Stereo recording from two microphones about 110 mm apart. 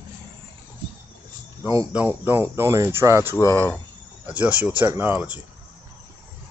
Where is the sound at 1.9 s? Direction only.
15° right (ahead or behind).